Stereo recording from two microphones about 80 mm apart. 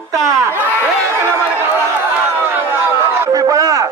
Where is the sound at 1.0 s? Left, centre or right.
Right.